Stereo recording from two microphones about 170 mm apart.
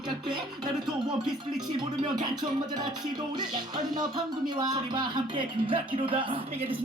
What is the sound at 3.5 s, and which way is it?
Music, 25° right (ahead or behind).